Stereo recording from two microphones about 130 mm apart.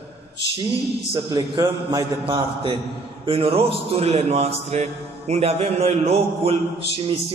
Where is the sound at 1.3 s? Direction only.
35° right (ahead or behind).